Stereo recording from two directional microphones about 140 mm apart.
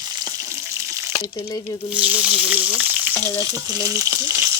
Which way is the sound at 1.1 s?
25° left (ahead or behind).